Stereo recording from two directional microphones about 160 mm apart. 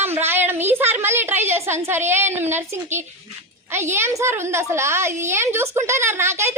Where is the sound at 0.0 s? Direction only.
15° right (ahead or behind).